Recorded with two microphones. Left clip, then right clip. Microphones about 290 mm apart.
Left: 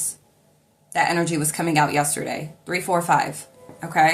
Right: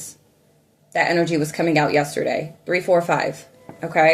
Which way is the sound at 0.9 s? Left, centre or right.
Centre.